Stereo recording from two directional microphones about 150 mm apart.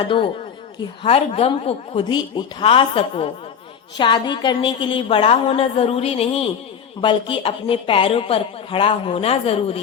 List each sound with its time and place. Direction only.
0.0 s speech: 35° left (ahead or behind)